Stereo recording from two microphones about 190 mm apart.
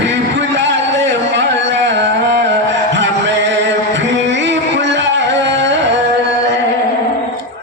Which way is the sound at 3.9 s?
70° right (ahead or behind).